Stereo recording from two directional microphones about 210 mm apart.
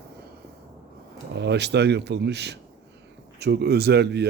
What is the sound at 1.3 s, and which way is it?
A man's voice, 55° right (ahead or behind).